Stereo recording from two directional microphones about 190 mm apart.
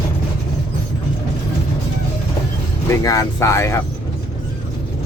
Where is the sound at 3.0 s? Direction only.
15° left (ahead or behind).